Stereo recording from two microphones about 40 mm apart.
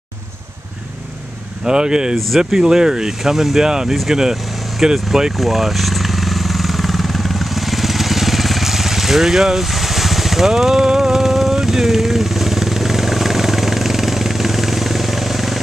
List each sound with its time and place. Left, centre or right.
1.6 s speech: centre
2.1 s speech: centre
2.5 s speech: centre
5.3 s vehicle: centre